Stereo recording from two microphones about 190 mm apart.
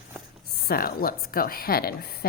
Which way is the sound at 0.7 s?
50° left (ahead or behind).